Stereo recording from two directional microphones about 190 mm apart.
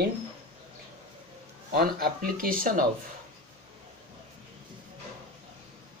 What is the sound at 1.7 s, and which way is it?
Speech, 50° right (ahead or behind).